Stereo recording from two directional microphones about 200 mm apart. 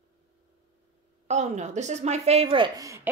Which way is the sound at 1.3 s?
35° right (ahead or behind).